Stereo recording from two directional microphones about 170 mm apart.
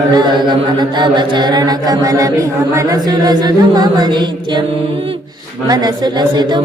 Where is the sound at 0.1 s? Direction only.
25° right (ahead or behind).